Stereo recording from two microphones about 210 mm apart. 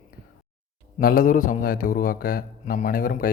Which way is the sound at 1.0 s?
40° left (ahead or behind).